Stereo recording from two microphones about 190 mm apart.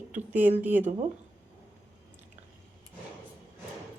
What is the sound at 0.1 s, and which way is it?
Speech, 10° right (ahead or behind).